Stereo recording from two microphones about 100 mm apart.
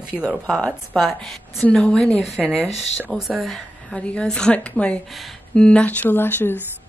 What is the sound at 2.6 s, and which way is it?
Speech, 90° left.